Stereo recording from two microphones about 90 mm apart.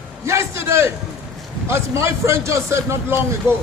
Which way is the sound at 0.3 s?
30° right (ahead or behind).